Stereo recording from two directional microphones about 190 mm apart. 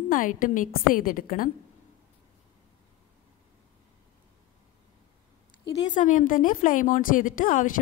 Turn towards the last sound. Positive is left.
turn(degrees=45)  # may be behind; listen again after turning